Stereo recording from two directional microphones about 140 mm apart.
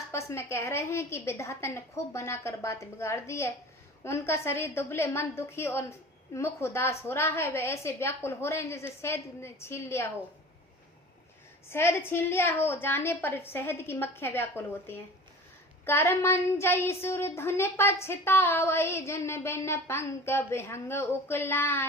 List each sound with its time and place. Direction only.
0.1 s a woman's voice: 20° left (ahead or behind)
11.7 s speech: 15° left (ahead or behind)